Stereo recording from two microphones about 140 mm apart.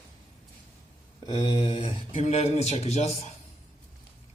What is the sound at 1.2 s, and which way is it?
Mantra, 30° left (ahead or behind).